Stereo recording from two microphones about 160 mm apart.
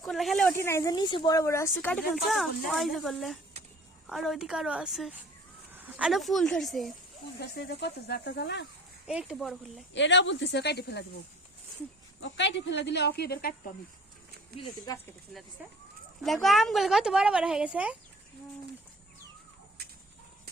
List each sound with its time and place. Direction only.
0.0 s speech: centre (ahead or behind)
0.5 s speech: 15° left (ahead or behind); by 6.9 s centre (ahead or behind)
7.3 s speech: 90° left
9.0 s speech: 5° right (ahead or behind)
10.4 s speech: 90° left
12.4 s speech: 90° left
14.9 s speech: 25° left (ahead or behind)
16.2 s speech: centre (ahead or behind)